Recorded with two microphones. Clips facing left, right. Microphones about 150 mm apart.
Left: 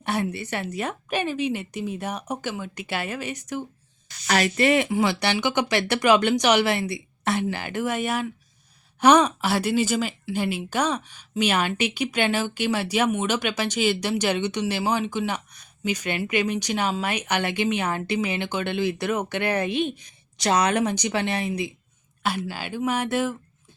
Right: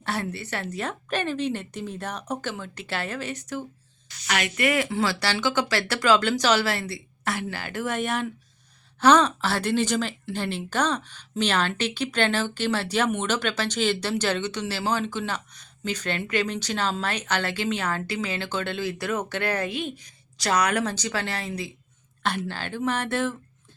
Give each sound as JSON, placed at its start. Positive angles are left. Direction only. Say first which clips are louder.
{"t": 0.0, "sound": "a woman's voice", "louder": "left 3 dB", "side_deg": 15}
{"t": 4.3, "sound": "a woman's voice", "louder": "left 5 dB", "side_deg": 35}
{"t": 22.2, "sound": "a woman's voice", "louder": "left 1 dB", "side_deg": 5}